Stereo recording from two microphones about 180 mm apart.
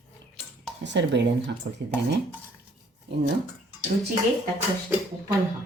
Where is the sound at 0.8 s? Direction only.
80° right.